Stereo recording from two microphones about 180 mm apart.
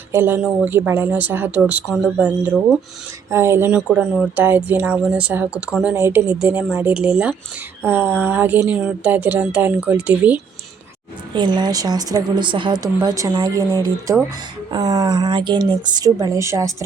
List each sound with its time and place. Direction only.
0.1 s speech: 10° right (ahead or behind)
11.3 s speech: 25° right (ahead or behind)